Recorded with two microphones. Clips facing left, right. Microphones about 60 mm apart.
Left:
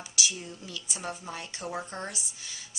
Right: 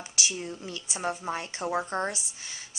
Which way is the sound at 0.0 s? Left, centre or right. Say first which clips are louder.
Right 1 dB; right.